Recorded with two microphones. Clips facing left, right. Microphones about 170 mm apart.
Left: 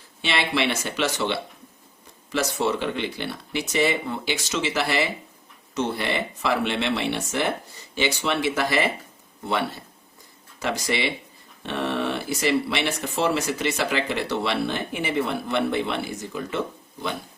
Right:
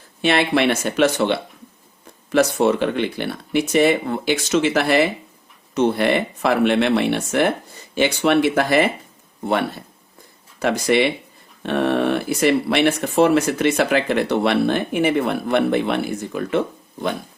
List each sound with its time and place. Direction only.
0.2 s speech: 50° right (ahead or behind)
10.6 s speech: 55° right (ahead or behind)